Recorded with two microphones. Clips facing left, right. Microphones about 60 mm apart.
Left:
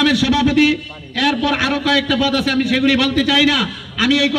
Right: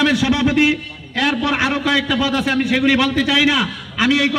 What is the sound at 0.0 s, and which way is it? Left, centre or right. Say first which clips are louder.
A man's voice: left 1 dB; right.